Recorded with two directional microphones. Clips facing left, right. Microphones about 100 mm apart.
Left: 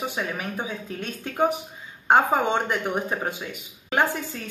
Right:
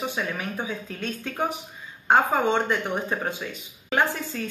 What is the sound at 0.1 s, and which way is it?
Speech, 20° left (ahead or behind).